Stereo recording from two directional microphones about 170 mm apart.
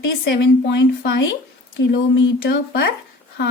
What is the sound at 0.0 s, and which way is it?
A woman's voice, 90° left.